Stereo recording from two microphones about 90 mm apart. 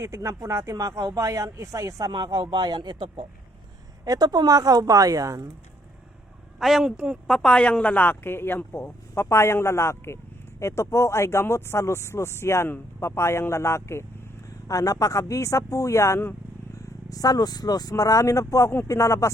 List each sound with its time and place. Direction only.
0.0 s speech: 30° right (ahead or behind)
2.1 s speech: 50° right (ahead or behind)
4.0 s speech: 45° right (ahead or behind)
6.6 s speech: centre (ahead or behind)
6.9 s speech: 10° right (ahead or behind)
7.3 s speech: 5° left (ahead or behind); by 19.3 s 35° left (ahead or behind)